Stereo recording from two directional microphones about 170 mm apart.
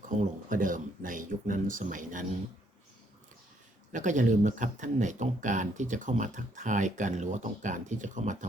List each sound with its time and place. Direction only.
0.2 s speech: 50° right (ahead or behind)
3.9 s speech: 45° right (ahead or behind)